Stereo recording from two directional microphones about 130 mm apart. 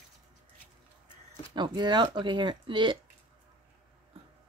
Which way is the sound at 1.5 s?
35° right (ahead or behind).